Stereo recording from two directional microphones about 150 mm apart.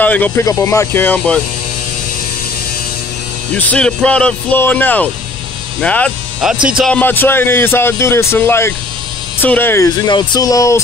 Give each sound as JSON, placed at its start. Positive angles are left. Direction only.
{"t": 0.0, "sound": "speech", "side_deg": 10}
{"t": 3.5, "sound": "speech", "side_deg": 10}
{"t": 6.4, "sound": "speech", "side_deg": -5}
{"t": 6.9, "sound": "speech", "side_deg": 10}